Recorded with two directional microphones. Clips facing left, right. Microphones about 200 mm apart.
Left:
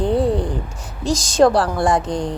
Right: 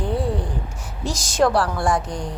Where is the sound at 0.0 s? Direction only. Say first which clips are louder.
Left 6 dB; 20° left (ahead or behind).